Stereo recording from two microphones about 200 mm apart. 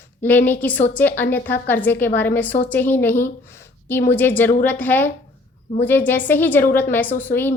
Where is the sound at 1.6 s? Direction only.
10° left (ahead or behind).